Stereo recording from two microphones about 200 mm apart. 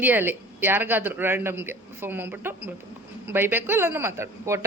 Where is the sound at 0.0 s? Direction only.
10° right (ahead or behind).